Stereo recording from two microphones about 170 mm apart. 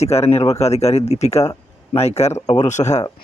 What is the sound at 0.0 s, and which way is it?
Speech, 35° left (ahead or behind).